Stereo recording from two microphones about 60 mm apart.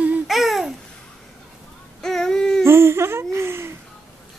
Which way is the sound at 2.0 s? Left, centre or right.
Centre.